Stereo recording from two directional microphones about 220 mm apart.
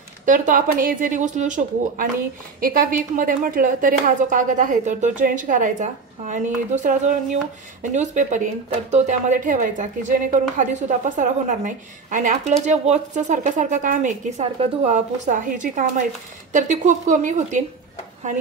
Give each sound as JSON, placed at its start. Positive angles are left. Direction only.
{"t": 0.2, "sound": "a woman's voice", "side_deg": -35}